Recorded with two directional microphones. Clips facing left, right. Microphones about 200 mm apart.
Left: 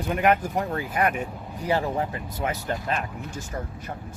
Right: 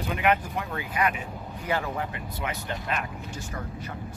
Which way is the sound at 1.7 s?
35° left (ahead or behind).